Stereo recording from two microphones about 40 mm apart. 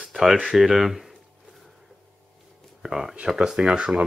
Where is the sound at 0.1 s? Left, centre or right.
Centre.